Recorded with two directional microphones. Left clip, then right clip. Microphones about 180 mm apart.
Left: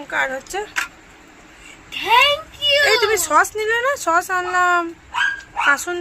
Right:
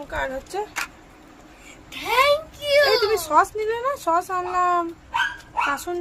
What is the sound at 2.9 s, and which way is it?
A woman's voice, centre (ahead or behind).